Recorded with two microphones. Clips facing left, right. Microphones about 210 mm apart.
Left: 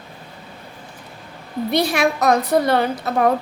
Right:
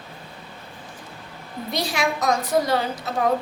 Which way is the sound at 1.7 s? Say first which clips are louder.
Left 6 dB; 60° left (ahead or behind).